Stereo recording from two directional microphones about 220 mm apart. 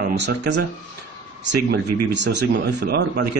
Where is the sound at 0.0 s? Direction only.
50° right (ahead or behind).